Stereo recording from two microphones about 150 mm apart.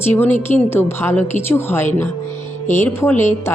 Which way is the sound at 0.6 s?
15° left (ahead or behind).